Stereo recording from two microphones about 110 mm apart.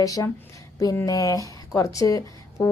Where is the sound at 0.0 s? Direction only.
35° left (ahead or behind).